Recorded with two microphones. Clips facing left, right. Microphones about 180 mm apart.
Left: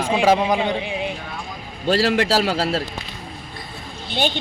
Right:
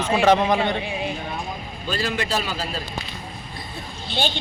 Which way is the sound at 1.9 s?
75° left (ahead or behind).